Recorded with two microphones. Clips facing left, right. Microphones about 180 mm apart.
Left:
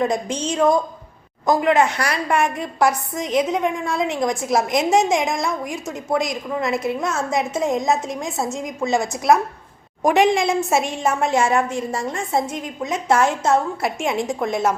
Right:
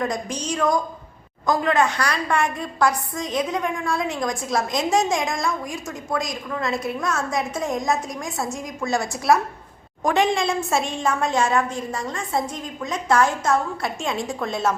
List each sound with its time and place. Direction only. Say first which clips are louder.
0.0 s a woman's voice: left 5 dB; 25° left (ahead or behind)